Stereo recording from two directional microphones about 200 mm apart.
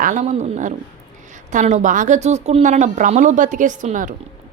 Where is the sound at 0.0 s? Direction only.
40° right (ahead or behind).